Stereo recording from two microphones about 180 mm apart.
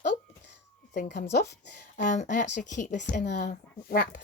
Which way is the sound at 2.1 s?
45° left (ahead or behind).